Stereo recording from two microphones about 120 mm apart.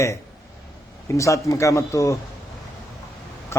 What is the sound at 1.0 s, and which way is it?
A man's voice, 25° left (ahead or behind).